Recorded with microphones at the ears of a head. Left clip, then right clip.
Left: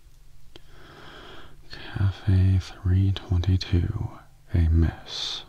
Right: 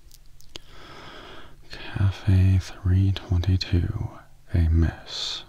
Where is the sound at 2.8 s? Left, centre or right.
Centre.